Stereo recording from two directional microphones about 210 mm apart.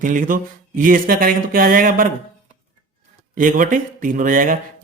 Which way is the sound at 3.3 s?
40° right (ahead or behind).